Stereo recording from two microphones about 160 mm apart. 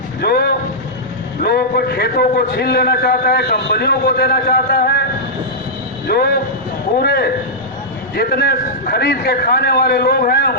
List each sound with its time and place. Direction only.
0.2 s a man's voice: 75° left (ahead or behind)
6.1 s a man's voice: 80° left